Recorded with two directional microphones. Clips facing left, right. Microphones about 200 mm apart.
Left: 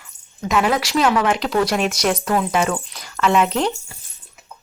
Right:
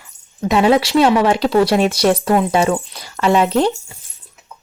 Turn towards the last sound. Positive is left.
turn(degrees=-30)  # may be behind; listen again after turning